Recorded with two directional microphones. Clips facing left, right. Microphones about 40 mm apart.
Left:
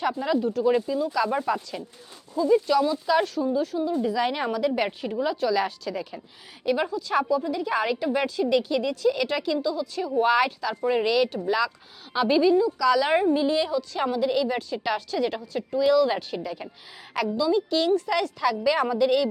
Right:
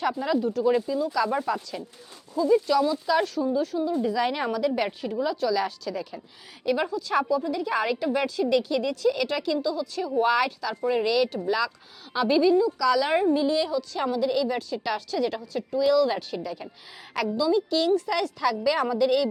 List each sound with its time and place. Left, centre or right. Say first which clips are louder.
0.2 s a woman's voice: left 1 dB; centre
5.2 s a woman's voice: left 1 dB; left